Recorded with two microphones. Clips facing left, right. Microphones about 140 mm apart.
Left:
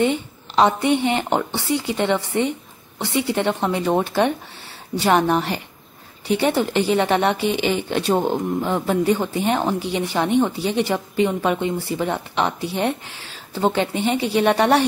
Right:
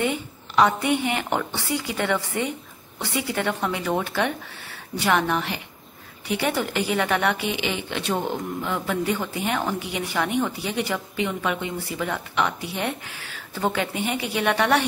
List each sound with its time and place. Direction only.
0.0 s a woman's voice: 25° left (ahead or behind)